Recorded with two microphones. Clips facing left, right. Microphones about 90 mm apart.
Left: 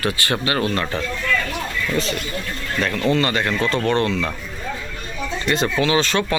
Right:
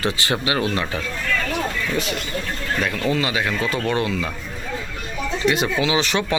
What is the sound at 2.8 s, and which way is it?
Speech, 5° right (ahead or behind).